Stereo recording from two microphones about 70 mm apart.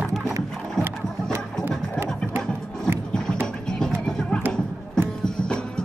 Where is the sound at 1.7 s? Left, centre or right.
Right.